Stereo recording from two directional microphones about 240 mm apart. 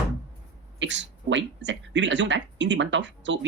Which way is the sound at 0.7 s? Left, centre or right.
Right.